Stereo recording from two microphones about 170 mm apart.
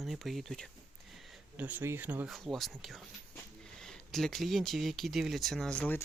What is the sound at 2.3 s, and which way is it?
Speech, centre (ahead or behind).